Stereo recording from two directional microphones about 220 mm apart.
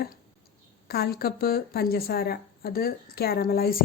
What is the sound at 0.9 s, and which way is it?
Speech, 45° left (ahead or behind).